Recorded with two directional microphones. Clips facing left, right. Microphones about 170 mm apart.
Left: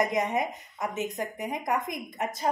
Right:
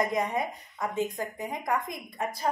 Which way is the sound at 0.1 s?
20° left (ahead or behind).